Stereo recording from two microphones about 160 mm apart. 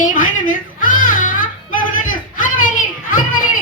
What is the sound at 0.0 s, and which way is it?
Music, 55° left (ahead or behind).